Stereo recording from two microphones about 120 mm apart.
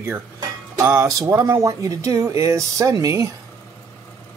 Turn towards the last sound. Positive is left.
turn(degrees=-25)  # may be behind; listen again after turning